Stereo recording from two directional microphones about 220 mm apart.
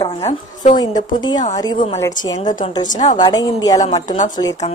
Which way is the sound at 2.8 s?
35° left (ahead or behind).